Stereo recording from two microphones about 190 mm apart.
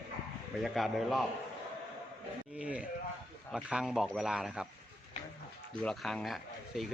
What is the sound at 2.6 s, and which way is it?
Speech, 5° right (ahead or behind).